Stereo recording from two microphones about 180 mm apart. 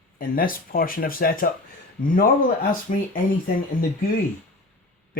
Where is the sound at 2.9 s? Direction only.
45° left (ahead or behind).